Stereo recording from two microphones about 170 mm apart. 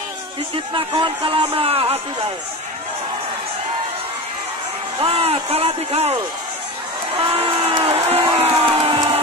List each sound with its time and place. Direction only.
0.7 s speech: 30° right (ahead or behind)
5.0 s speech: 35° right (ahead or behind)
7.2 s crowd: 35° right (ahead or behind)